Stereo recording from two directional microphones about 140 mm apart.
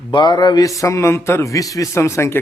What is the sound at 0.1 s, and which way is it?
A man's voice, 30° left (ahead or behind).